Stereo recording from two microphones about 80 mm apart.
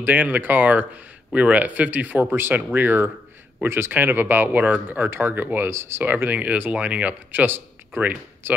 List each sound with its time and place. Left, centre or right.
0.0 s speech: right